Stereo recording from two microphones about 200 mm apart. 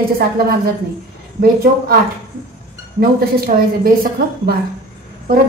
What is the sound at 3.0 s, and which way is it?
A woman's voice, 45° right (ahead or behind).